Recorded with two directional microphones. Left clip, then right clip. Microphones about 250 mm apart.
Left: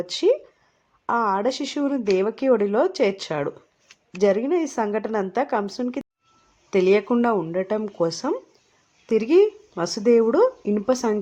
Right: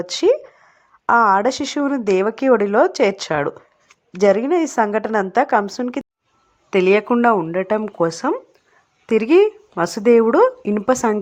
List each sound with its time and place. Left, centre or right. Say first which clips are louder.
0.0 s a woman's voice: right 4 dB; centre